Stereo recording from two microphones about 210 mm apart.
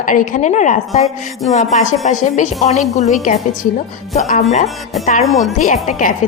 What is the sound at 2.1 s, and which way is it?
A woman's voice, 35° left (ahead or behind).